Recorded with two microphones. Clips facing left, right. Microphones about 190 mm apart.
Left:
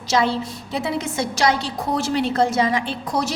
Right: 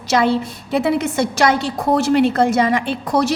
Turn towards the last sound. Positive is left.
turn(degrees=-60)  # may be behind; listen again after turning